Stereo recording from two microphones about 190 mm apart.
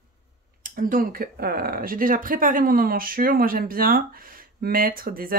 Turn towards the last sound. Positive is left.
turn(degrees=-50)  # may be behind; listen again after turning